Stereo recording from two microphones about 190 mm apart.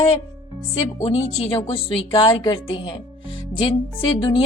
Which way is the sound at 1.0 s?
35° left (ahead or behind).